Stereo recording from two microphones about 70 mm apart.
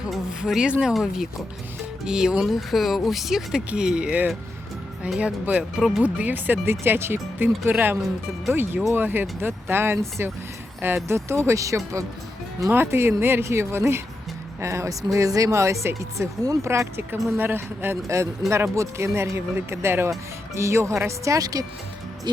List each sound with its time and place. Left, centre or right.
0.1 s speech: centre
6.0 s speech: right
12.7 s speech: right
16.6 s speech: right
18.1 s speech: right